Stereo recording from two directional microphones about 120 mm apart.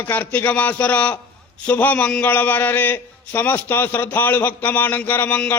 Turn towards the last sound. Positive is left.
turn(degrees=15)  # may be behind; listen again after turning